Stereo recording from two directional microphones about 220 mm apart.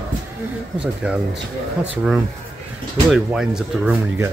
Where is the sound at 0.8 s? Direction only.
5° right (ahead or behind).